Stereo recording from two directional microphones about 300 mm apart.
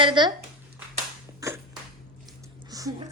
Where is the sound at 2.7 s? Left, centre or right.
Centre.